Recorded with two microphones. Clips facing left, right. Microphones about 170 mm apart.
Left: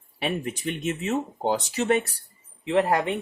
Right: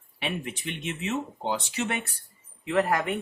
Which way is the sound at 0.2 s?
40° left (ahead or behind).